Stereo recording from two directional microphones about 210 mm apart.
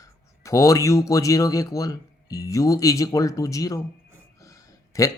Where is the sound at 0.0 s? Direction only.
15° left (ahead or behind).